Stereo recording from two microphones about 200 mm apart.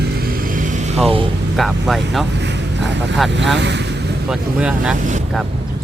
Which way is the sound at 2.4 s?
60° right (ahead or behind).